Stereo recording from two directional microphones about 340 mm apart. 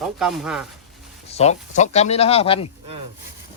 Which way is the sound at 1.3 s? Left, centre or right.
Centre.